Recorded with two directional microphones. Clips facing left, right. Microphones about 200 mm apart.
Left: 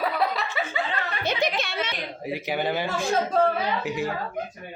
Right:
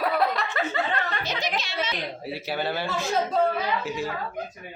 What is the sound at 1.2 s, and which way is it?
Music, 55° left (ahead or behind).